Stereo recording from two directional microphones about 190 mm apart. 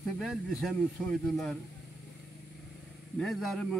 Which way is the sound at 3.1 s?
Centre (ahead or behind).